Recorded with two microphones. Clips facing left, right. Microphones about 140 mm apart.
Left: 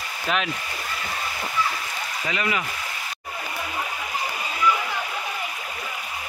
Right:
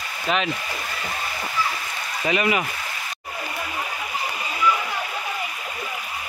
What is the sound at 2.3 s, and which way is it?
Speech, 20° right (ahead or behind).